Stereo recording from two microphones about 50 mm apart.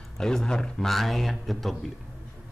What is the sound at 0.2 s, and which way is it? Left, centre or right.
A man's voice, centre.